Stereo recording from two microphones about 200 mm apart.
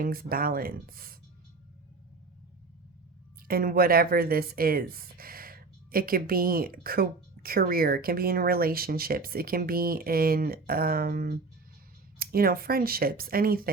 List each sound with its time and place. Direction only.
0.0 s speech: 50° right (ahead or behind)
3.4 s speech: 45° right (ahead or behind)